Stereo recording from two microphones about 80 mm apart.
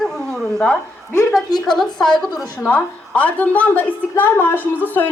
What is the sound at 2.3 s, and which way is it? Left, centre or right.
Speech, left.